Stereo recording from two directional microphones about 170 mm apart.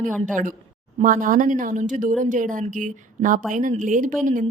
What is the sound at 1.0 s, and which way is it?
A woman's voice, 50° right (ahead or behind).